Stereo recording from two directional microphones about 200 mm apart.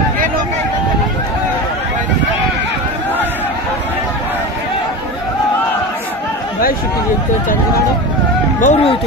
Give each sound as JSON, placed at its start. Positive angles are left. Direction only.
{"t": 8.5, "sound": "speech", "side_deg": 35}